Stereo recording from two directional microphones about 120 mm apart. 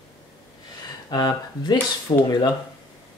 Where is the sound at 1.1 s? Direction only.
35° left (ahead or behind).